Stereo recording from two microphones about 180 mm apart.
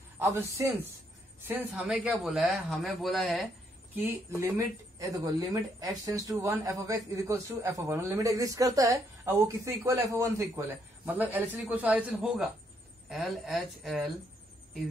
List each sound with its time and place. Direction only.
0.2 s a man's voice: 15° right (ahead or behind)
3.9 s a man's voice: 15° right (ahead or behind)